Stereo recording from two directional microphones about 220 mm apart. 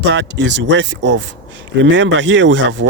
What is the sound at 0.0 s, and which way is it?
Speech, 50° right (ahead or behind).